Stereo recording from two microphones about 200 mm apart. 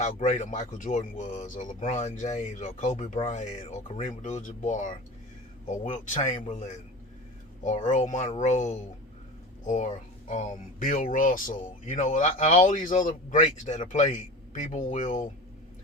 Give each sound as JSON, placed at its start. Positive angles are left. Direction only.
{"t": 0.0, "sound": "speech", "side_deg": 40}